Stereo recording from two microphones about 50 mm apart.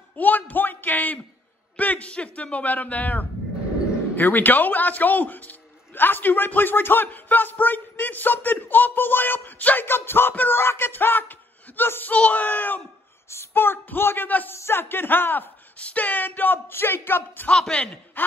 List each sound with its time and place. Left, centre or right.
0.1 s a man's voice: left
9.8 s a woman's voice: left
10.5 s a sound: left
12.1 s a man's voice: left
13.3 s a woman's voice: left
14.5 s a woman's voice: left
15.8 s a man's voice: left
17.7 s speech: centre
18.2 s a sound: left